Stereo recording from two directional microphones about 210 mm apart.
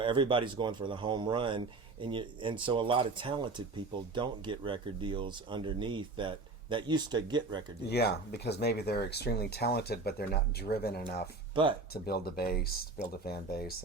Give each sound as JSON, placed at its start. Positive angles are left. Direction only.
{"t": 0.0, "sound": "speech", "side_deg": -25}
{"t": 7.9, "sound": "speech", "side_deg": 50}